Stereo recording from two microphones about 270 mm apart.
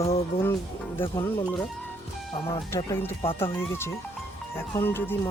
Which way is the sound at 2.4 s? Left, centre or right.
Centre.